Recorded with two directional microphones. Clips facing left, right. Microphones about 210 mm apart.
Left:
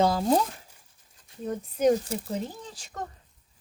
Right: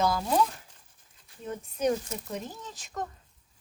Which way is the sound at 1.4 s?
35° left (ahead or behind).